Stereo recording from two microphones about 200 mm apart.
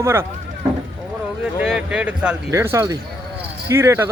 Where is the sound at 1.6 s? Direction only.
5° right (ahead or behind).